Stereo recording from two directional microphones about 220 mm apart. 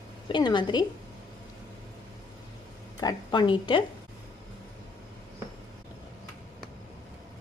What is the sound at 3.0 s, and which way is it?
Speech, 20° left (ahead or behind).